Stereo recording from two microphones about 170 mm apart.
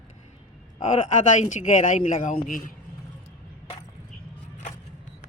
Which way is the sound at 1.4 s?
45° left (ahead or behind).